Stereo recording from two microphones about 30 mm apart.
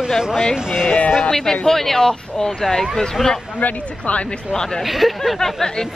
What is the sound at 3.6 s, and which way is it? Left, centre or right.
Speech, left.